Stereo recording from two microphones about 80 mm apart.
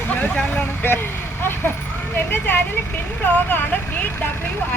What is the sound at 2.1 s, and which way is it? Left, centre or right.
Speech, left.